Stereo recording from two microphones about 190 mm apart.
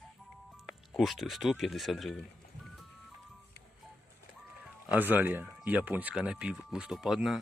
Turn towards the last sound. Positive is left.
turn(degrees=0)  # may be behind; listen again after turning